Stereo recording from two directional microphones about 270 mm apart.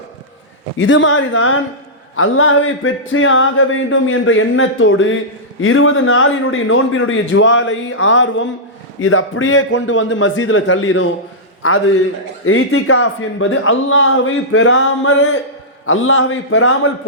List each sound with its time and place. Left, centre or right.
0.8 s speech: left